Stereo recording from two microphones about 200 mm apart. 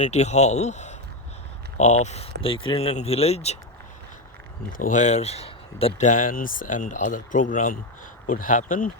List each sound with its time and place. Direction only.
0.0 s speech: 35° left (ahead or behind)
4.8 s speech: 40° left (ahead or behind)